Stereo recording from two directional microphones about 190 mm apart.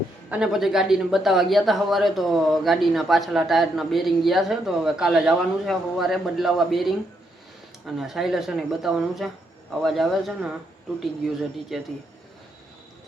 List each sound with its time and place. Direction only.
0.3 s speech: 5° right (ahead or behind)
11.7 s speech: centre (ahead or behind)